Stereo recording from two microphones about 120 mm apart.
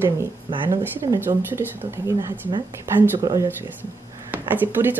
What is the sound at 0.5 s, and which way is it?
Speech, 35° right (ahead or behind).